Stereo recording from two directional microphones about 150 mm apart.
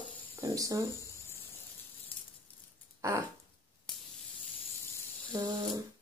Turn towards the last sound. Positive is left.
turn(degrees=-25)  # may be behind; listen again after turning